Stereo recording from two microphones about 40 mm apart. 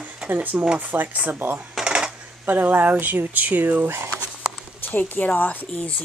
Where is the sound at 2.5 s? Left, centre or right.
Right.